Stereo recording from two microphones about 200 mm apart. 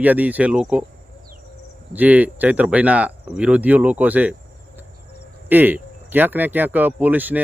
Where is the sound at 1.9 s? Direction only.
10° right (ahead or behind).